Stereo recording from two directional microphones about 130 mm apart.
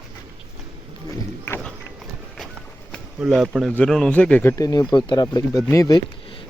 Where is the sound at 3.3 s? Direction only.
Centre (ahead or behind); by 4.6 s 15° left (ahead or behind).